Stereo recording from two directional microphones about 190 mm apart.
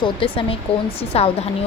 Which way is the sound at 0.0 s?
30° left (ahead or behind).